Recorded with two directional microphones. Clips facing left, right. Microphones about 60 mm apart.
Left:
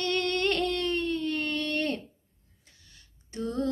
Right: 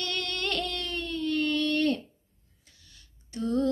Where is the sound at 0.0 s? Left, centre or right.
Left.